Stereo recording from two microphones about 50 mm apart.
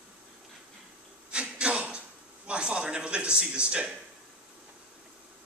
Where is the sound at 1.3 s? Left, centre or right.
Right.